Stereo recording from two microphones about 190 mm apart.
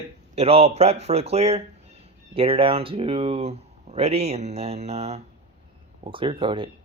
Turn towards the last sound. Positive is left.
turn(degrees=-25)  # may be behind; listen again after turning